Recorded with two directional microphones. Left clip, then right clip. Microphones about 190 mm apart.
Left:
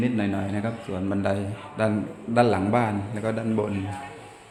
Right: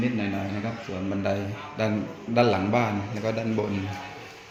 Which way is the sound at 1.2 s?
15° left (ahead or behind).